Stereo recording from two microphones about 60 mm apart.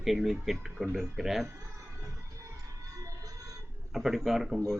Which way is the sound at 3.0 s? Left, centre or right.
Right.